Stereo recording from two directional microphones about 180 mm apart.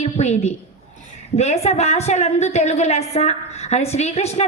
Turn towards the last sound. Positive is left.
turn(degrees=35)  # may be behind; listen again after turning